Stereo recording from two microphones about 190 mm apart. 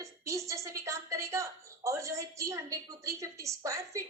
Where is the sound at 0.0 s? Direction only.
15° right (ahead or behind).